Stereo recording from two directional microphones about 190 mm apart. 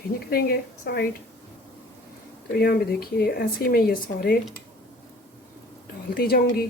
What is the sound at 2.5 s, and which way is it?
Speech, 55° left (ahead or behind).